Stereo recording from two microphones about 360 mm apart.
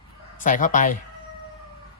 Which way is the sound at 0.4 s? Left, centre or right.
Left.